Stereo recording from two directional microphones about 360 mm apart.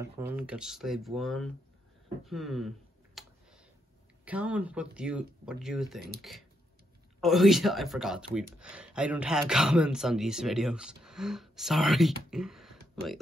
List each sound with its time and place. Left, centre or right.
0.0 s speech: centre
3.2 s a sound: centre
4.2 s speech: centre